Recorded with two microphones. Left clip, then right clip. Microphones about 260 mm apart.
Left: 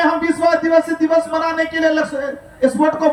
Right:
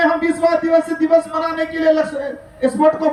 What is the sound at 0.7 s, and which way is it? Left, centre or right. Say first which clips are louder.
Speech: even; right.